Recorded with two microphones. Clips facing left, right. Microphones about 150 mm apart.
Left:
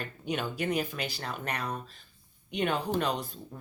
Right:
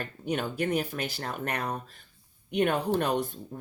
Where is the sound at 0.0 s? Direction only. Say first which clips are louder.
Right 2 dB; 50° right (ahead or behind).